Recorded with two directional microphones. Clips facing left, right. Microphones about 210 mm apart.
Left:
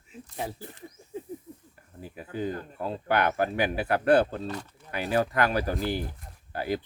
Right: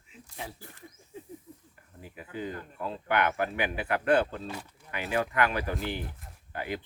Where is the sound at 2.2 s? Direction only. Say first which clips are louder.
Left 5 dB; 40° left (ahead or behind).